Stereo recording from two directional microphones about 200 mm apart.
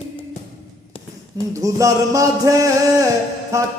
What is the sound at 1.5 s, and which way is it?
A man's voice, 15° right (ahead or behind).